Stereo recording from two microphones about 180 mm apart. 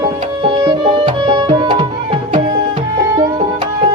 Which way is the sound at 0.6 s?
25° right (ahead or behind).